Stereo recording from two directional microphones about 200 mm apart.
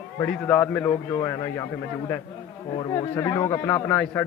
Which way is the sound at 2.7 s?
20° left (ahead or behind).